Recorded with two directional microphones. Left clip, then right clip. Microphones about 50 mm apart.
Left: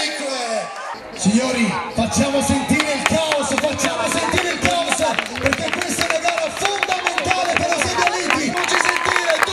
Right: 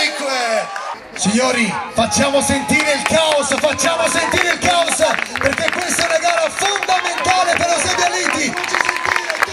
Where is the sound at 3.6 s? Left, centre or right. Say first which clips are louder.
Right 4 dB; right.